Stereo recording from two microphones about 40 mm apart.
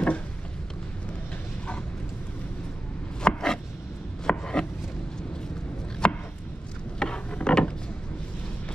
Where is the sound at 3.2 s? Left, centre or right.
Left.